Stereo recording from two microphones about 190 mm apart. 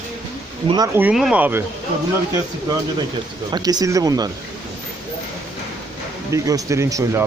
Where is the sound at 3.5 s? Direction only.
20° right (ahead or behind).